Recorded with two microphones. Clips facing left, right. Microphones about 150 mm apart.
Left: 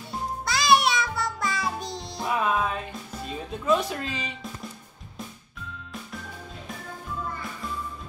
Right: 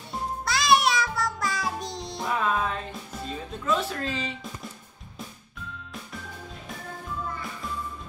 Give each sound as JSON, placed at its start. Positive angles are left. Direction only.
{"t": 0.5, "sound": "music", "side_deg": 0}
{"t": 3.6, "sound": "speech", "side_deg": 15}